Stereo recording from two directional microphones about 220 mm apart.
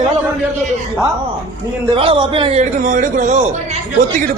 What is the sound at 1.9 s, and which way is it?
A man's voice, 25° right (ahead or behind).